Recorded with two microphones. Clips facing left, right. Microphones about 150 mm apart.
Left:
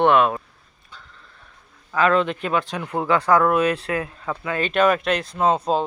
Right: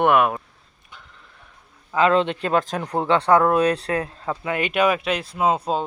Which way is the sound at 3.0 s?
30° right (ahead or behind).